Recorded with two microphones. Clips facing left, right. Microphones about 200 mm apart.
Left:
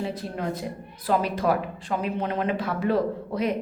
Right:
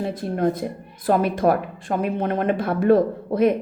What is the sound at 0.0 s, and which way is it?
A woman's voice, 50° right (ahead or behind).